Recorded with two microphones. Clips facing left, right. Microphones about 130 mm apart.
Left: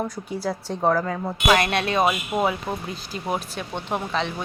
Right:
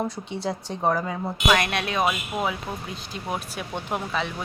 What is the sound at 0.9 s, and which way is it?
Speech, 10° right (ahead or behind).